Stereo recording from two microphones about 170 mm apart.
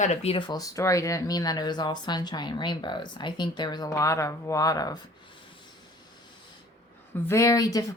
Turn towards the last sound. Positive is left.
turn(degrees=20)  # may be behind; listen again after turning